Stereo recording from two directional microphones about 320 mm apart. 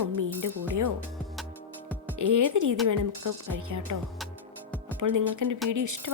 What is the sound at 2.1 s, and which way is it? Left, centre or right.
A woman's voice, right.